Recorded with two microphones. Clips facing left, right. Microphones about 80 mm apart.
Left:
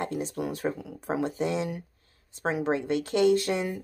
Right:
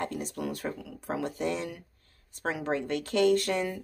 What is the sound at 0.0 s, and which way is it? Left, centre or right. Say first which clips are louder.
Speech: left 3 dB; left.